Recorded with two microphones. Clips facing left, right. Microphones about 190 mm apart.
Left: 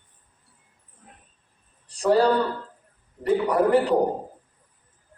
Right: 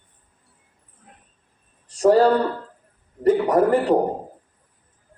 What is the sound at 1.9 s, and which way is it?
A man's voice, 45° right (ahead or behind).